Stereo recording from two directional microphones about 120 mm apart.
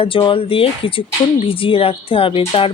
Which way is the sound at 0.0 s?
45° left (ahead or behind).